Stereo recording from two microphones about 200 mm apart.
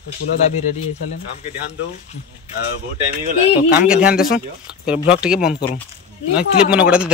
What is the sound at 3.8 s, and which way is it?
Speech, 5° right (ahead or behind).